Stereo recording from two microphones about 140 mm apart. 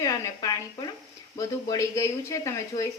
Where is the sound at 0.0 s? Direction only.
25° left (ahead or behind).